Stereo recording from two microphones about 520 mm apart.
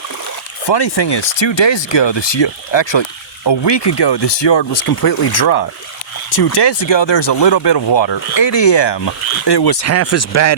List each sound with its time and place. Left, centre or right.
0.7 s speech: left
4.7 s speech: left
9.8 s speech: left